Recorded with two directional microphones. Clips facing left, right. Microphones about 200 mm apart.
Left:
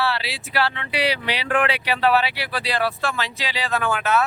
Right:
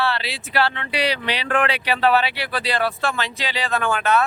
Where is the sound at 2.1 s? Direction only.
5° left (ahead or behind).